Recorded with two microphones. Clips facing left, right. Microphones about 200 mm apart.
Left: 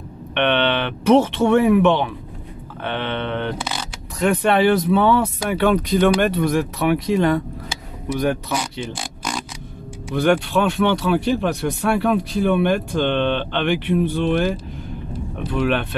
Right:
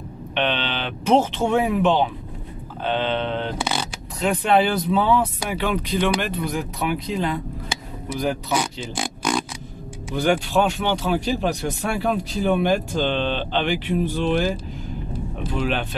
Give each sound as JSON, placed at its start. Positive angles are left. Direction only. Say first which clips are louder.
{"t": 0.3, "sound": "speech", "louder": "left 6 dB", "side_deg": 60}
{"t": 6.3, "sound": "speech", "louder": "left 7 dB", "side_deg": 75}
{"t": 10.1, "sound": "speech", "louder": "left 2 dB", "side_deg": 55}
{"t": 15.3, "sound": "vehicle", "louder": "left 4 dB", "side_deg": 55}